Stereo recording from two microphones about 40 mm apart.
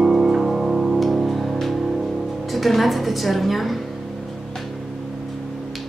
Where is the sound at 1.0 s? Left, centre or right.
Centre.